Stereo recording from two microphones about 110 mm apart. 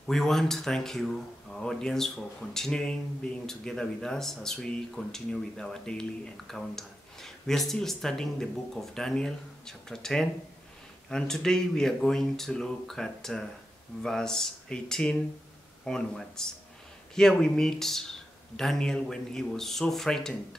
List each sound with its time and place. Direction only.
0.0 s speech: 5° left (ahead or behind)